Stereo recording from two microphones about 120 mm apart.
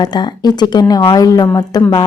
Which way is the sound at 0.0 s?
35° left (ahead or behind).